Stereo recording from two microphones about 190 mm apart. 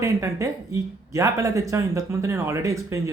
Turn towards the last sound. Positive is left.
turn(degrees=-15)  # may be behind; listen again after turning